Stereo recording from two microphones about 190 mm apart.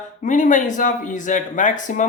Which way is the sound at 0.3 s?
40° left (ahead or behind).